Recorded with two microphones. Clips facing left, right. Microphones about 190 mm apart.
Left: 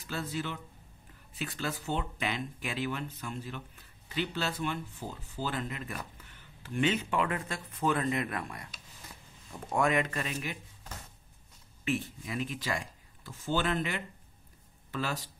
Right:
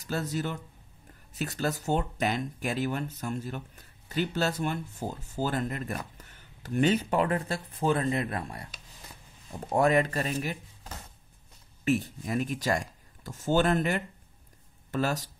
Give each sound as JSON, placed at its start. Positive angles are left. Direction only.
{"t": 0.0, "sound": "speech", "side_deg": -40}
{"t": 11.8, "sound": "speech", "side_deg": -40}